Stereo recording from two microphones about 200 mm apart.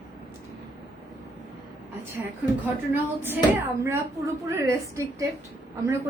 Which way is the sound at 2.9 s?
10° right (ahead or behind).